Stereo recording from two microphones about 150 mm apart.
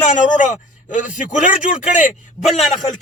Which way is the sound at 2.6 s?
Centre (ahead or behind).